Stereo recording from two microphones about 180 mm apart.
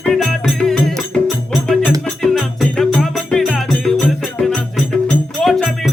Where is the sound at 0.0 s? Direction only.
Centre (ahead or behind).